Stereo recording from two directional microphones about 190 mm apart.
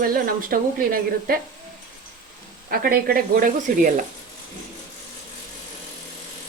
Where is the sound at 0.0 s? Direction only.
50° right (ahead or behind).